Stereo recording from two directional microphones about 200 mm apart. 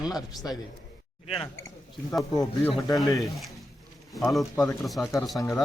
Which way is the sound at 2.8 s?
20° left (ahead or behind).